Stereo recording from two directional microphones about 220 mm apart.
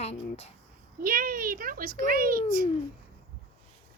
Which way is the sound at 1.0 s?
40° right (ahead or behind).